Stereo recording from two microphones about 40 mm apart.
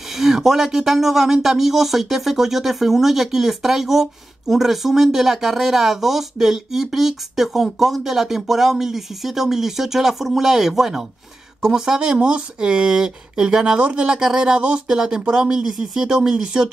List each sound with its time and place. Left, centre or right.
0.1 s speech: centre